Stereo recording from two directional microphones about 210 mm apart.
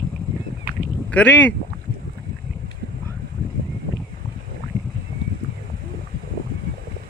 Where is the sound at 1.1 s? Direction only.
5° left (ahead or behind).